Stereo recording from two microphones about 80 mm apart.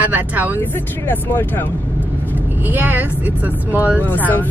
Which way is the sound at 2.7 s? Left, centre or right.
Right.